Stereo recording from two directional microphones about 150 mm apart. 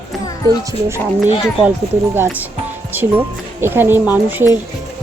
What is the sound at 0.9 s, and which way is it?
Speech, 15° right (ahead or behind).